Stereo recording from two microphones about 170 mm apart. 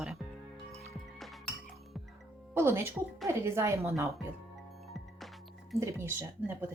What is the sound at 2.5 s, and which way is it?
Speech, 15° right (ahead or behind).